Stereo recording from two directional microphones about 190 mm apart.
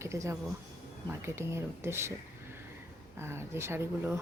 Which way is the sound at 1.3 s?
15° right (ahead or behind).